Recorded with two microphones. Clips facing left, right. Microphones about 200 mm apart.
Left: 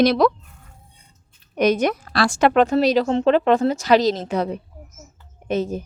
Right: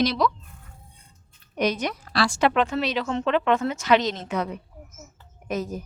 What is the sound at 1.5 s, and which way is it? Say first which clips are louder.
A woman's voice: left 7 dB; 50° left (ahead or behind).